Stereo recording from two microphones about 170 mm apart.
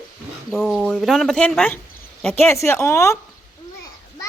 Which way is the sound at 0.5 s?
Centre (ahead or behind).